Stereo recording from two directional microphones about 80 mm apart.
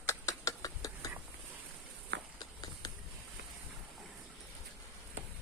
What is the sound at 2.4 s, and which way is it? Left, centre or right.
Walk, left.